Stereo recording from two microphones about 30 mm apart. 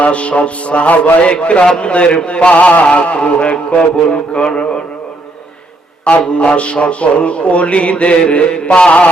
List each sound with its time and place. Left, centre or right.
0.0 s music: left
1.3 s speech: left
6.2 s music: left
8.3 s speech: left